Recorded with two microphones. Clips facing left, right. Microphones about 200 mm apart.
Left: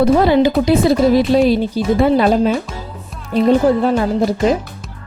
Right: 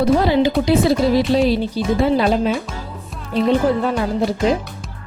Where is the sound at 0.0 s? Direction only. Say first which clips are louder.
Left 3 dB; 55° left (ahead or behind).